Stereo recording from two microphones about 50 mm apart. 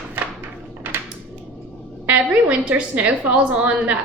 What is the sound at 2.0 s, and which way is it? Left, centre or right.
A woman's voice, right.